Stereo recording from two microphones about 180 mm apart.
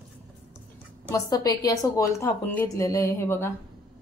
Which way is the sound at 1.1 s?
20° left (ahead or behind).